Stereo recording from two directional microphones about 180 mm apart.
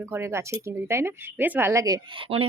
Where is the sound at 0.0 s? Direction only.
15° right (ahead or behind).